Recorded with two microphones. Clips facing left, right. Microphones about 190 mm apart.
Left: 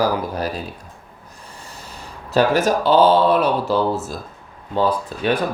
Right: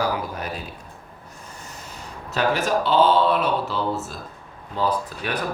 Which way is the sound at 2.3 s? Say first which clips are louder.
Left 5 dB; 40° left (ahead or behind).